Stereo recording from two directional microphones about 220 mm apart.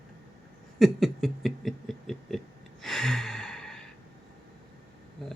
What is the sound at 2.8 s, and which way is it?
Gasp, centre (ahead or behind).